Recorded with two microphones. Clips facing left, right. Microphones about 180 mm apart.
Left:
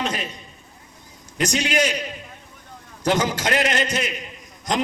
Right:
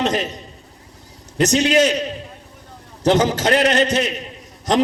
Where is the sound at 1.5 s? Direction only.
10° left (ahead or behind).